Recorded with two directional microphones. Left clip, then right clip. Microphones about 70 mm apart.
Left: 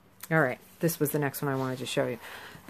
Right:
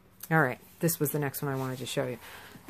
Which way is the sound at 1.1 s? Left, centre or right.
Centre.